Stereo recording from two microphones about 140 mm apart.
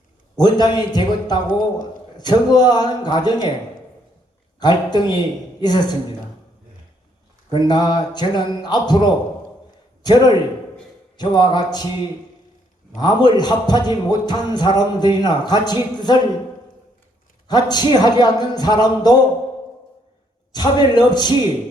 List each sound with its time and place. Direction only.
0.3 s speech: 30° left (ahead or behind)
4.6 s a man's voice: 30° left (ahead or behind)
7.5 s a man's voice: 30° left (ahead or behind)
13.0 s a man's voice: 30° left (ahead or behind)
17.5 s speech: 30° left (ahead or behind)
20.5 s a man's voice: 30° left (ahead or behind)